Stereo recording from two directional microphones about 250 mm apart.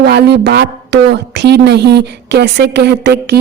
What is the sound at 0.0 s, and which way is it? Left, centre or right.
A woman's voice, right.